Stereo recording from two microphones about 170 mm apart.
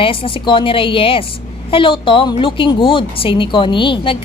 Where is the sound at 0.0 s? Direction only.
30° left (ahead or behind).